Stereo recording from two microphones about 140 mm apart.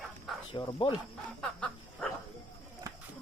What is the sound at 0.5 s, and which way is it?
Speech, 35° left (ahead or behind).